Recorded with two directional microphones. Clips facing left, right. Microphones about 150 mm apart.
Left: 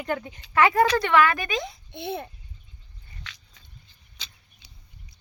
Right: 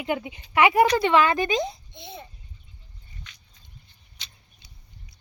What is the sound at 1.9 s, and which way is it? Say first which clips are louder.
Babbling: left 9 dB; 60° left (ahead or behind).